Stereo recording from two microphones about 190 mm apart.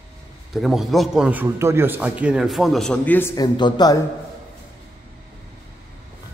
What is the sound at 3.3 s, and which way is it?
Speech, 20° left (ahead or behind).